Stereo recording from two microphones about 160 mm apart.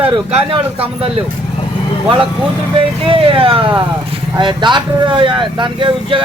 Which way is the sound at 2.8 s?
35° right (ahead or behind).